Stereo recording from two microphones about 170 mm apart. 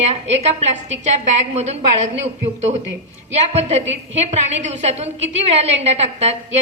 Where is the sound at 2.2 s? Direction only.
40° right (ahead or behind).